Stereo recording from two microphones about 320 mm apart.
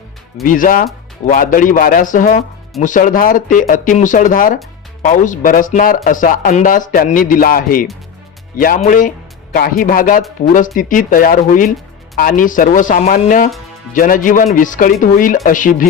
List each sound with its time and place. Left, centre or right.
0.4 s a man's voice: left